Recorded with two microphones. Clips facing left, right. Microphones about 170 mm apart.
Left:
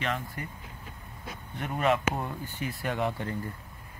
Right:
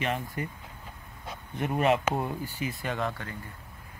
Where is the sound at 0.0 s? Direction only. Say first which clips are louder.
Right 2 dB; 15° right (ahead or behind).